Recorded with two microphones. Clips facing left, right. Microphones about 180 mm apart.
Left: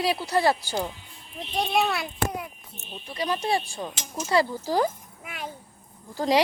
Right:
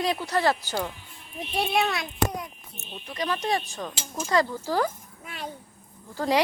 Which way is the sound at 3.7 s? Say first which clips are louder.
Even; 10° left (ahead or behind).